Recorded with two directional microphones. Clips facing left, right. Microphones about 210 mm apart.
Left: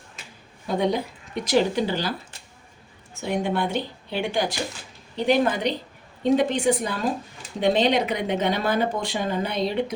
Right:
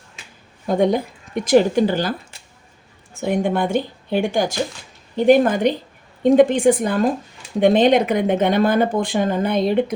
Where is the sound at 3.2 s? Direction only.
50° right (ahead or behind).